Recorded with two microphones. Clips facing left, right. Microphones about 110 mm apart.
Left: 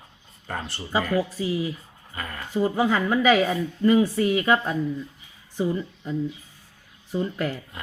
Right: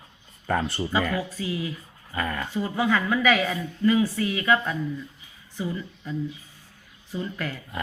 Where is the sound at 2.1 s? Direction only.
90° right.